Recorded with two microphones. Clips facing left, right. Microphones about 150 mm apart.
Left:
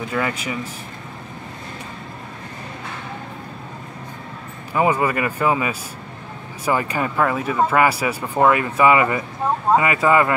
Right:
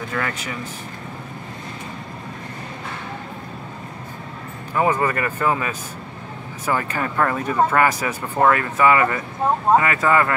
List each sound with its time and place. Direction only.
0.1 s speech: 10° left (ahead or behind)
4.7 s speech: 10° left (ahead or behind)